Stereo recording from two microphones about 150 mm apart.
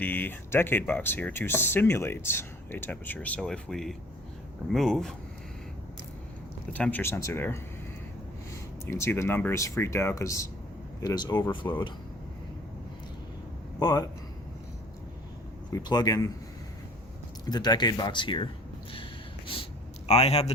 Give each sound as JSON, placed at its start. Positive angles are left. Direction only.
{"t": 0.0, "sound": "speech", "side_deg": 10}
{"t": 6.7, "sound": "speech", "side_deg": 10}
{"t": 8.9, "sound": "speech", "side_deg": 20}
{"t": 13.7, "sound": "speech", "side_deg": 25}
{"t": 15.7, "sound": "speech", "side_deg": 25}
{"t": 17.4, "sound": "speech", "side_deg": 30}
{"t": 20.1, "sound": "a man's voice", "side_deg": 45}